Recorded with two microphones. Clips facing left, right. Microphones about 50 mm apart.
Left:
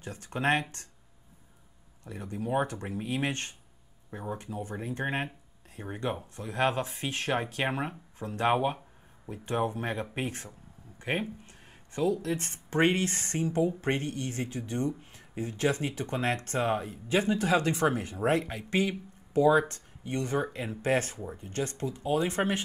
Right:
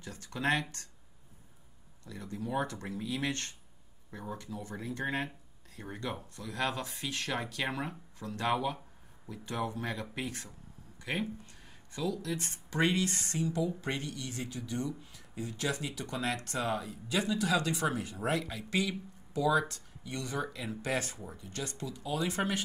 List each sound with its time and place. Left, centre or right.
0.0 s speech: left
2.0 s speech: left